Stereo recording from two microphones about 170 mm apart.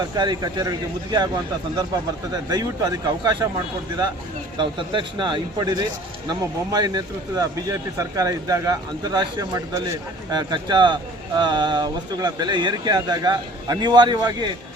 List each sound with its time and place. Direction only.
0.1 s speech: 25° right (ahead or behind)
2.3 s speech: 20° right (ahead or behind)
4.5 s speech: 30° right (ahead or behind)